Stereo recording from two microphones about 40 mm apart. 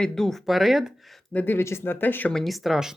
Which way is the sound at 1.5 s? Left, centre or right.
Left.